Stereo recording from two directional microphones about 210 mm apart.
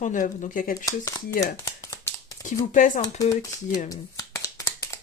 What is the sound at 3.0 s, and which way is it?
Speech, 15° left (ahead or behind).